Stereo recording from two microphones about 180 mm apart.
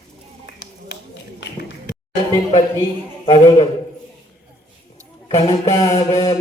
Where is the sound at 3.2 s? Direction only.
30° left (ahead or behind).